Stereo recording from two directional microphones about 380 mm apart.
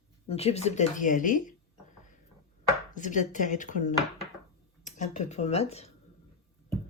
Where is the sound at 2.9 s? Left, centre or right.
Centre.